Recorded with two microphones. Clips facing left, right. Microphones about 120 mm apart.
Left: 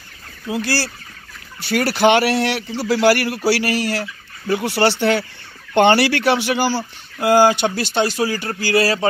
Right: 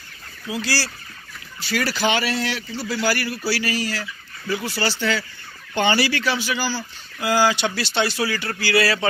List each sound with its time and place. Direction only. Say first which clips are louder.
0.5 s speech: left 4 dB; 55° left (ahead or behind)